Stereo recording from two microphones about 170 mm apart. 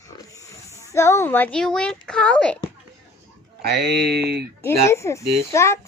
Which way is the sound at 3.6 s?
70° right (ahead or behind).